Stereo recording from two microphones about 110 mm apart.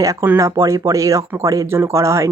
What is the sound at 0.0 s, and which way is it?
Speech, 30° right (ahead or behind).